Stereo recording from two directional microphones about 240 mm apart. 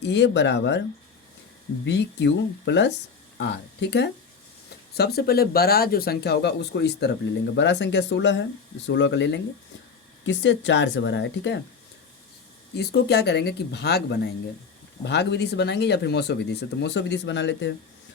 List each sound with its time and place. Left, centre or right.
0.0 s speech: left
1.8 s speech: left
12.7 s speech: left